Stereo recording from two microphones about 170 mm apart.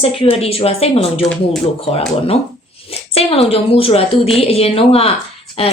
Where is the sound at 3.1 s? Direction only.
35° left (ahead or behind).